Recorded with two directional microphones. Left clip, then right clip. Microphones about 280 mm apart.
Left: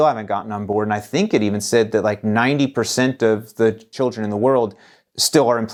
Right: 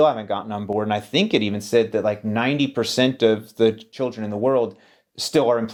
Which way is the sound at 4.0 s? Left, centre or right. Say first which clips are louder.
Left 7 dB; left.